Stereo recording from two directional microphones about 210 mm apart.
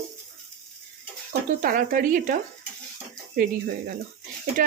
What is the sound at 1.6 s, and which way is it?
Speech, 40° right (ahead or behind).